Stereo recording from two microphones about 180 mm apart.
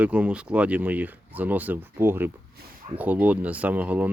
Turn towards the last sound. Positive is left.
turn(degrees=-10)  # may be behind; listen again after turning